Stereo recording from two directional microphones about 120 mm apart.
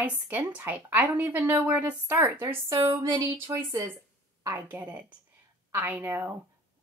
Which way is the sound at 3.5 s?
30° right (ahead or behind).